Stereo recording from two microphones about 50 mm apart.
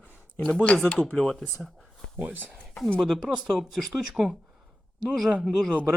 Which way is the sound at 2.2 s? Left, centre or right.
Right.